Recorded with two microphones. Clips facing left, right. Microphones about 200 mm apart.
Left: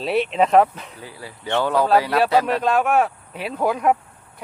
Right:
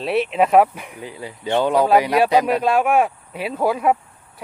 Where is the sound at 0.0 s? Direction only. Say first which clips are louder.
Right 1 dB; centre (ahead or behind).